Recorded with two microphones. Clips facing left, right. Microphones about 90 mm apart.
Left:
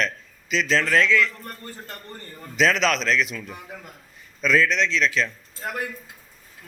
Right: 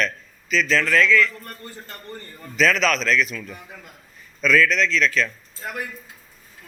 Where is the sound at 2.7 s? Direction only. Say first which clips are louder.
Right 2 dB; 25° left (ahead or behind).